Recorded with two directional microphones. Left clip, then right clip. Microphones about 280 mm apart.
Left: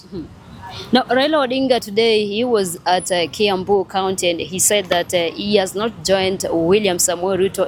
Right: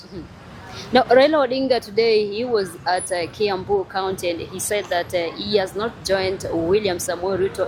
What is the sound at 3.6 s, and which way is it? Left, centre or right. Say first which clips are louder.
Speech: left 4 dB; left.